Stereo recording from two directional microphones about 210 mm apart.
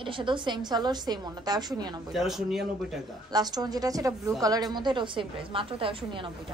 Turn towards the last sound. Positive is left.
turn(degrees=-25)  # may be behind; listen again after turning